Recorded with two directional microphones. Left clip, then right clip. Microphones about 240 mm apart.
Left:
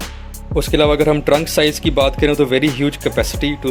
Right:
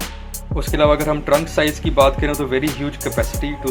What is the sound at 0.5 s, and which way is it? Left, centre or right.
Speech, left.